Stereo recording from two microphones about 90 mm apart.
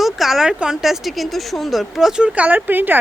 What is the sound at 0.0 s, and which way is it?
Speech, 5° right (ahead or behind).